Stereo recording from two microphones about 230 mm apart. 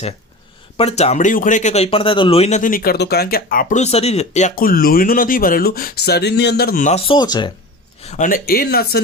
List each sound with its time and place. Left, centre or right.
0.8 s a man's voice: left
8.0 s a man's voice: left